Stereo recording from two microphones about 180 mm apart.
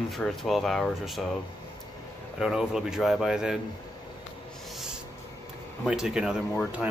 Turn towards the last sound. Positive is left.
turn(degrees=-5)  # may be behind; listen again after turning